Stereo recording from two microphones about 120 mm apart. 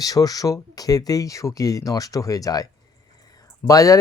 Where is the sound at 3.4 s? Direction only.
30° left (ahead or behind).